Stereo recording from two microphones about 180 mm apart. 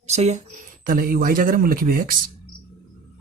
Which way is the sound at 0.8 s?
55° right (ahead or behind).